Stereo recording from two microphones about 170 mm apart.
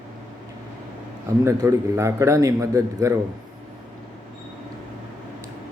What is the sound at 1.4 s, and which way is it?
Speech, 15° right (ahead or behind).